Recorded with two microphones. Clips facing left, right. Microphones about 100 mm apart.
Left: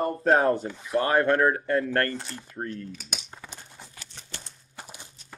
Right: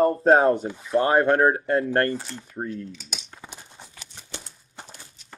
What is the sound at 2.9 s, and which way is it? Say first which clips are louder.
Speech: left 1 dB; 50° left (ahead or behind).